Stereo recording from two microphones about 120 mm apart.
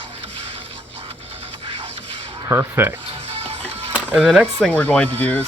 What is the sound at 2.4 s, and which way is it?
Speech, 20° right (ahead or behind).